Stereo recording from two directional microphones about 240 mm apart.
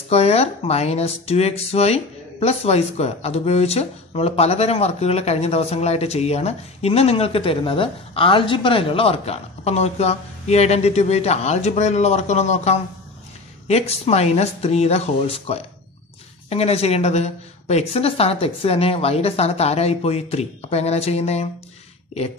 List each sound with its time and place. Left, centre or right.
0.1 s speech: left